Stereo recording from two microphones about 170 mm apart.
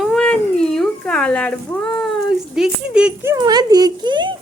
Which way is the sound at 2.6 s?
5° right (ahead or behind).